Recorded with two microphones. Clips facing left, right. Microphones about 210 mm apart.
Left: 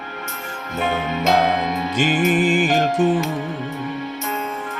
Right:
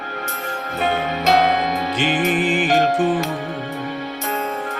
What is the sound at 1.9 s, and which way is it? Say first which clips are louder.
Music: left 3 dB; 45° left (ahead or behind).